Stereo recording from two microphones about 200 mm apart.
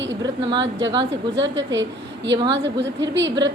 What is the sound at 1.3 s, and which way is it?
A woman's voice, 65° right (ahead or behind).